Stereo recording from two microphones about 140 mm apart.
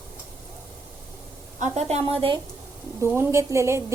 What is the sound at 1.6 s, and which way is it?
Speech, 50° right (ahead or behind).